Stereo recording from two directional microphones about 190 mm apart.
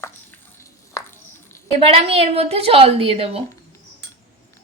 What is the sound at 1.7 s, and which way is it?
A woman's voice, 30° right (ahead or behind).